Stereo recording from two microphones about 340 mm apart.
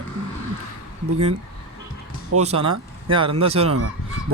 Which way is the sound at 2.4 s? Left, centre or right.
Centre.